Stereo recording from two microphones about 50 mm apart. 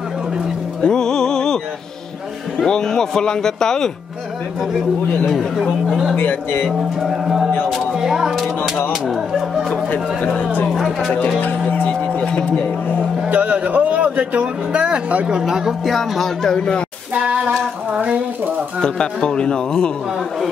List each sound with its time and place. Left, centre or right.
0.8 s music: centre
2.6 s speech: centre
5.2 s speech: centre
6.1 s speech: left
7.0 s speech: centre
12.2 s speech: left
13.3 s a man's voice: right
15.2 s speech: centre
16.5 s speech: centre
17.1 s female singing: right
18.8 s speech: centre